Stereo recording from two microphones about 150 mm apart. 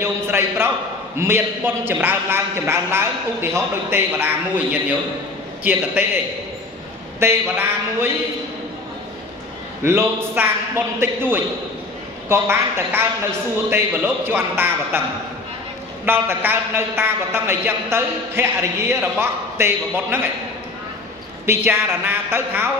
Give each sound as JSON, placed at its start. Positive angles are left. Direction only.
{"t": 0.0, "sound": "a woman's voice", "side_deg": -15}
{"t": 7.2, "sound": "a woman's voice", "side_deg": -15}
{"t": 9.8, "sound": "a woman's voice", "side_deg": -15}
{"t": 16.1, "sound": "a woman's voice", "side_deg": -15}
{"t": 21.5, "sound": "a woman's voice", "side_deg": -15}